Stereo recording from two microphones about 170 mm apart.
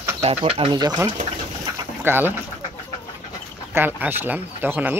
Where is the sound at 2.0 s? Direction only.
15° right (ahead or behind).